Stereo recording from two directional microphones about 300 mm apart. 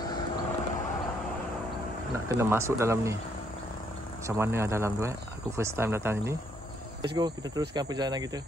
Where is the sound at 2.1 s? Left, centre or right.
Centre.